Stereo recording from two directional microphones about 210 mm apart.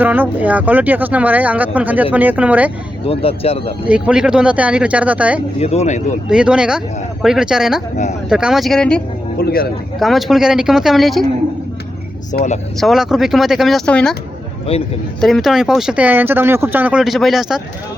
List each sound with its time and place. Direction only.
0.0 s speech: 10° right (ahead or behind)
3.1 s speech: 30° left (ahead or behind)
3.8 s speech: 5° right (ahead or behind)
5.5 s speech: 30° left (ahead or behind)
6.2 s speech: 5° right (ahead or behind)
9.4 s speech: 45° left (ahead or behind)
10.0 s speech: centre (ahead or behind)
12.3 s speech: 35° left (ahead or behind)
12.8 s speech: centre (ahead or behind)
14.7 s speech: 25° left (ahead or behind)
15.2 s speech: centre (ahead or behind)